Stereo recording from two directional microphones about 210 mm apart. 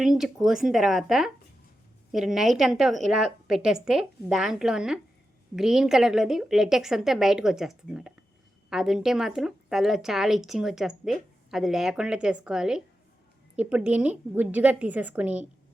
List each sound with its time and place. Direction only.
0.0 s speech: centre (ahead or behind)